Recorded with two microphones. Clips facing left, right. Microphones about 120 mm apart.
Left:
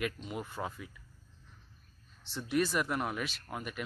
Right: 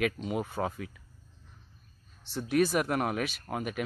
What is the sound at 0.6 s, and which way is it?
Speech, 65° right (ahead or behind).